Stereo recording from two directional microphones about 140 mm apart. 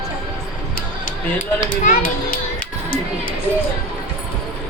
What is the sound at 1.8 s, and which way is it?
Speech, 65° left (ahead or behind).